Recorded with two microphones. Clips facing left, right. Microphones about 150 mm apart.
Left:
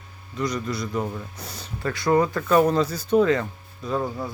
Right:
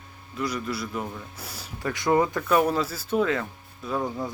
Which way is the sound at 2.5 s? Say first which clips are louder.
Left 6 dB; 5° right (ahead or behind).